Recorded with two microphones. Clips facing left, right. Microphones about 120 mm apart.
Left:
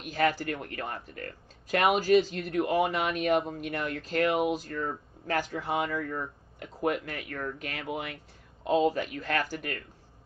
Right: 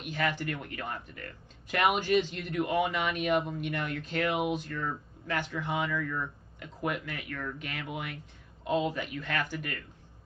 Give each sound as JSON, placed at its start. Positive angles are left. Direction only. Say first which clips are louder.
{"t": 0.0, "sound": "speech", "louder": "left 4 dB", "side_deg": 40}